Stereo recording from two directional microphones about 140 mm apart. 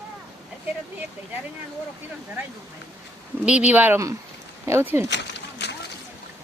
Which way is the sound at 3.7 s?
10° right (ahead or behind).